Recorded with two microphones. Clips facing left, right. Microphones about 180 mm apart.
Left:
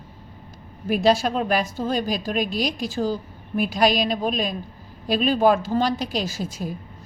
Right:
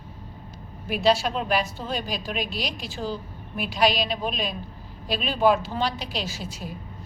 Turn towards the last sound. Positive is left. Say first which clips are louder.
# left 5 dB
turn(degrees=45)  # may be behind; listen again after turning